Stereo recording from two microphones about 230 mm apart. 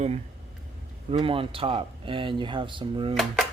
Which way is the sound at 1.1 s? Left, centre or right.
Right.